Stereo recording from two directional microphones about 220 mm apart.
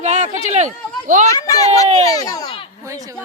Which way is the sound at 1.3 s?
15° left (ahead or behind).